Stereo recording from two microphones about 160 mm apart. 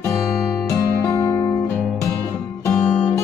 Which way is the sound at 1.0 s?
20° left (ahead or behind).